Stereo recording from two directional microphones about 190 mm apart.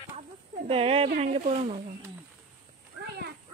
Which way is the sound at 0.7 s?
30° right (ahead or behind).